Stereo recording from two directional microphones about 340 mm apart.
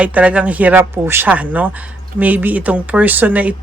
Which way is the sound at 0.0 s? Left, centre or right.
Centre.